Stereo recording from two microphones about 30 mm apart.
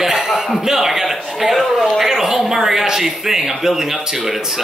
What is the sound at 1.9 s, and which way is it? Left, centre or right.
A man's voice, centre.